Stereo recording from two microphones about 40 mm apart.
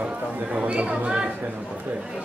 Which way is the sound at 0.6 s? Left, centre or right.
Right.